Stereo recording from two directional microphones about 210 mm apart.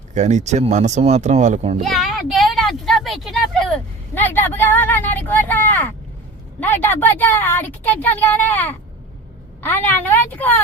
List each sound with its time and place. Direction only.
0.1 s speech: 35° right (ahead or behind)
1.8 s a sound: centre (ahead or behind)
4.1 s speech: 10° left (ahead or behind)